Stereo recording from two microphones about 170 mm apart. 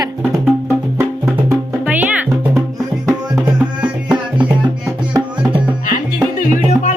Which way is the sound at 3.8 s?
5° right (ahead or behind).